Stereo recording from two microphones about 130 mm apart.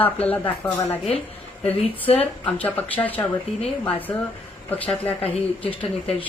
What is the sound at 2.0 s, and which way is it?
Speech, 45° left (ahead or behind).